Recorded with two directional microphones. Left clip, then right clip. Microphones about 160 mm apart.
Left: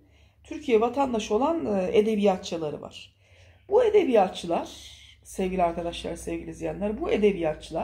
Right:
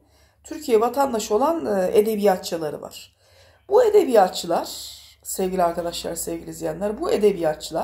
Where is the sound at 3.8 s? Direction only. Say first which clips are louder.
Right 4 dB; 15° right (ahead or behind).